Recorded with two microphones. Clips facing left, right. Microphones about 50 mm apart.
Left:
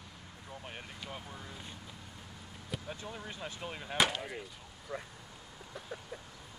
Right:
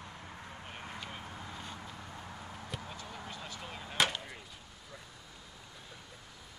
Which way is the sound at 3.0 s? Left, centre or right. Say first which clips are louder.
Left 1 dB; centre.